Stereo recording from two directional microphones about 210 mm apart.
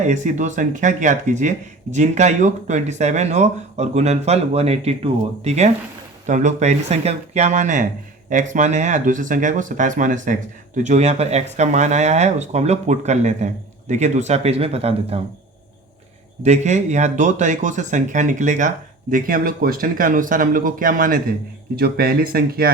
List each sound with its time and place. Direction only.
0.0 s speech: 35° right (ahead or behind)
16.4 s speech: 35° right (ahead or behind)